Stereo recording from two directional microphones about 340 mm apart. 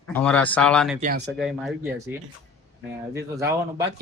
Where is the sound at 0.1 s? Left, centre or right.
Centre.